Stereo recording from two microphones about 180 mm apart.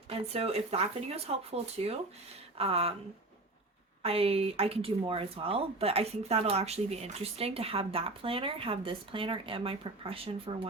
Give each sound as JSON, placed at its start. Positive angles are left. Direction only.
{"t": 0.1, "sound": "speech", "side_deg": -35}
{"t": 4.0, "sound": "speech", "side_deg": -35}